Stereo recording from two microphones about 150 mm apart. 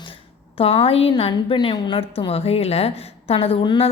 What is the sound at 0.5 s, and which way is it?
A woman's voice, 40° left (ahead or behind).